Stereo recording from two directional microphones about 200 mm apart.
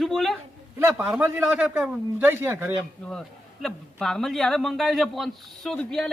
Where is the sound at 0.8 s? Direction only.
10° right (ahead or behind).